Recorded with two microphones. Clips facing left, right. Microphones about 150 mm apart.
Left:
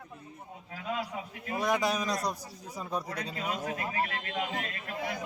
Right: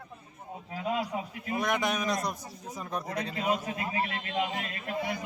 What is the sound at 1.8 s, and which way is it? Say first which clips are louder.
Speech: even; 35° left (ahead or behind).